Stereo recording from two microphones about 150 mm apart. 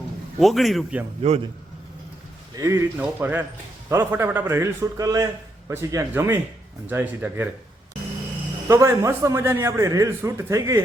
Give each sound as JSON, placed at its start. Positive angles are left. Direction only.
{"t": 0.3, "sound": "speech", "side_deg": 0}
{"t": 1.2, "sound": "a man's voice", "side_deg": -45}
{"t": 2.6, "sound": "a man's voice", "side_deg": -20}
{"t": 8.6, "sound": "a man's voice", "side_deg": -20}